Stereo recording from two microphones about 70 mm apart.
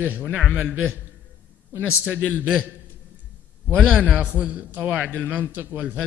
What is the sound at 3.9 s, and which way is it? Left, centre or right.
A man's voice, centre.